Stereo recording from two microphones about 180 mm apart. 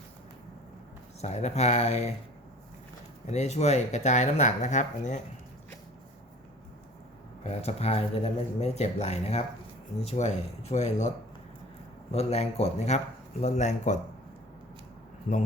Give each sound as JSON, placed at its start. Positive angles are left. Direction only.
{"t": 1.2, "sound": "speech", "side_deg": 35}
{"t": 3.2, "sound": "speech", "side_deg": 40}
{"t": 7.4, "sound": "speech", "side_deg": 35}
{"t": 12.1, "sound": "speech", "side_deg": 35}